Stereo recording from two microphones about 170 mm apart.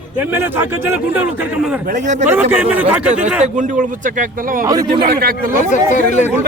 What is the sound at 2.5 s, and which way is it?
Speech, 10° right (ahead or behind).